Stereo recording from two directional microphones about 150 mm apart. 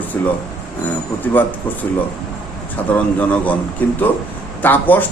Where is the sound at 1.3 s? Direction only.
10° left (ahead or behind).